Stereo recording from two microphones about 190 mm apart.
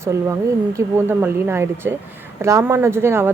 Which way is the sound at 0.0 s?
15° right (ahead or behind).